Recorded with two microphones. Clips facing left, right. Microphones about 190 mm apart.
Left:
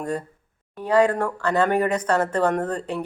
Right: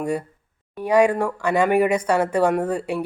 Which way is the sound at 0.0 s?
10° right (ahead or behind).